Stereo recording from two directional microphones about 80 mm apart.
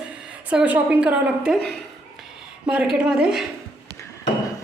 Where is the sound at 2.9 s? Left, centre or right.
Centre.